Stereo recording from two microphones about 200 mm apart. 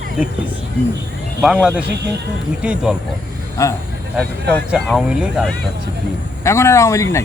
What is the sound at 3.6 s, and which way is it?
Speech, 15° left (ahead or behind).